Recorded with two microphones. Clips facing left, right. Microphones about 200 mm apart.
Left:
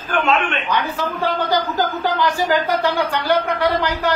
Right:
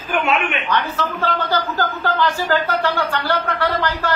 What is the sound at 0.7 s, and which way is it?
A man's voice, 15° left (ahead or behind).